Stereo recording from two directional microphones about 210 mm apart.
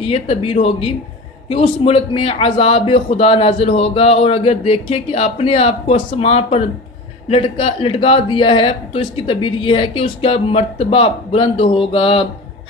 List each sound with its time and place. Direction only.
0.0 s a man's voice: 25° left (ahead or behind)